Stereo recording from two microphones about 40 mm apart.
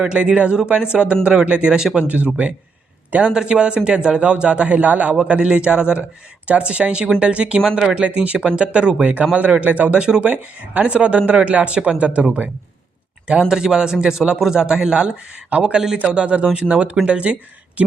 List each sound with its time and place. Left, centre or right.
0.1 s speech: right
2.0 s a man's voice: right
5.5 s speech: right
8.0 s speech: right
10.0 s speech: right
10.2 s speech: right
13.5 s a man's voice: centre
15.4 s speech: right
15.7 s a man's voice: centre
16.1 s speech: right